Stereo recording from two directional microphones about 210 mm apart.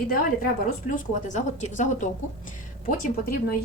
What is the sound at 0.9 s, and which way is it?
A woman's voice, 35° left (ahead or behind).